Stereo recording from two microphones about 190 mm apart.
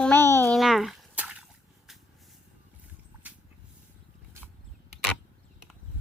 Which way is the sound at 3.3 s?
5° right (ahead or behind).